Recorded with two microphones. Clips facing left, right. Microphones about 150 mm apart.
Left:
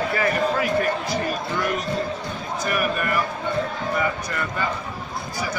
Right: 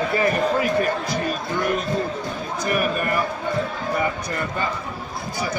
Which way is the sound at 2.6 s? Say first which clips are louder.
Right 2 dB; 25° right (ahead or behind).